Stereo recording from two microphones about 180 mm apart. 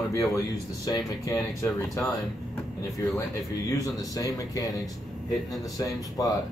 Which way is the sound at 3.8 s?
20° left (ahead or behind).